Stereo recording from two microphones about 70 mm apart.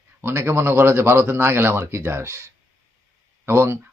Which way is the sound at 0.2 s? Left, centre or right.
Right.